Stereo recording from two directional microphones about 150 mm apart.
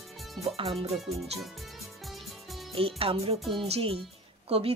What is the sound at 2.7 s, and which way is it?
Speech, 40° right (ahead or behind).